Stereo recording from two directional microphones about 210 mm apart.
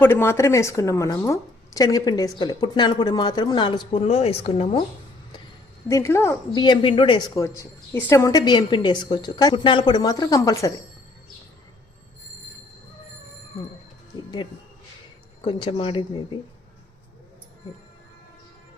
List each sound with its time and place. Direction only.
0.0 s a woman's voice: 10° left (ahead or behind); by 4.8 s 30° left (ahead or behind)
5.9 s a woman's voice: 15° left (ahead or behind)
15.4 s a woman's voice: 25° left (ahead or behind)